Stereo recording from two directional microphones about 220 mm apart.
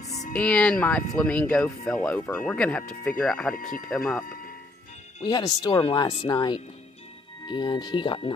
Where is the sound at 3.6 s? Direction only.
40° left (ahead or behind).